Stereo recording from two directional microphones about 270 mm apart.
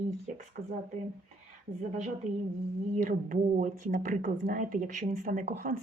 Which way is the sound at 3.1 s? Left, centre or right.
Right.